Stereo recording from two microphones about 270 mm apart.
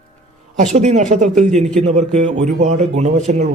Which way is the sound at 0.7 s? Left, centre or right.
Right.